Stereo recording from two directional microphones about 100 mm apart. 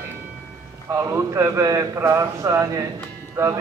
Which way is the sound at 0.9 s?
30° right (ahead or behind).